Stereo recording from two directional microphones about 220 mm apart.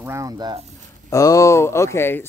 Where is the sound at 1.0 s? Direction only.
15° left (ahead or behind).